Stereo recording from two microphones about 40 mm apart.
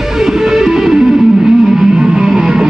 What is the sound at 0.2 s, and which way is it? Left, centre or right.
Music, centre.